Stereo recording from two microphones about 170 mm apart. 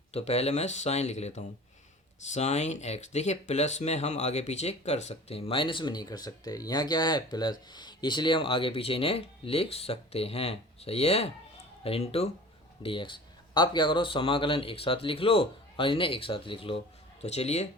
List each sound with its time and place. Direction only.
0.1 s speech: 35° left (ahead or behind)